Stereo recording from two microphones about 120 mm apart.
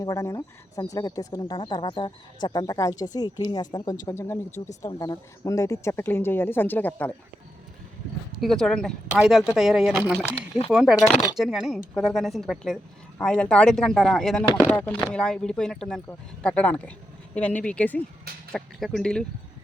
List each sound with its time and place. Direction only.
0.0 s speech: 25° left (ahead or behind)
4.9 s speech: 35° left (ahead or behind); by 7.1 s 15° left (ahead or behind)
8.4 s speech: 5° left (ahead or behind)